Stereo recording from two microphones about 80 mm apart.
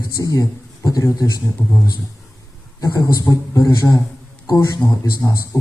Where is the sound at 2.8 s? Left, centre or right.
Left.